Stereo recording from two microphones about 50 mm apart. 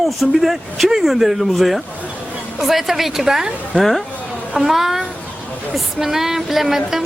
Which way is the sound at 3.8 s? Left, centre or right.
Centre.